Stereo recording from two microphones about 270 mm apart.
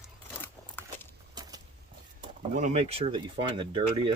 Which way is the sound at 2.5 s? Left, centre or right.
Right.